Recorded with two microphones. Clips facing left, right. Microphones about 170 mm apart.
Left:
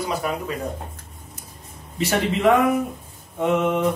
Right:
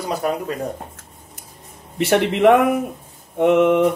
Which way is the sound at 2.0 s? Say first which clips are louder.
Right 5 dB; 60° right (ahead or behind).